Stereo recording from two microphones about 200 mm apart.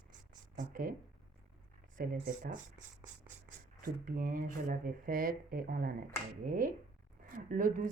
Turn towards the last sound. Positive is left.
turn(degrees=-40)  # may be behind; listen again after turning